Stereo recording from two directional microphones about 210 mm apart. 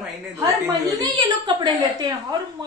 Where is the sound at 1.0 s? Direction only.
20° right (ahead or behind).